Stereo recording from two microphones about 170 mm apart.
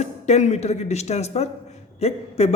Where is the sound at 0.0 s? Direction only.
40° left (ahead or behind).